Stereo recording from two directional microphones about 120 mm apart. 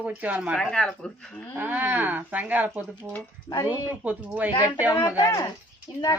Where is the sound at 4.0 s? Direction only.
10° right (ahead or behind).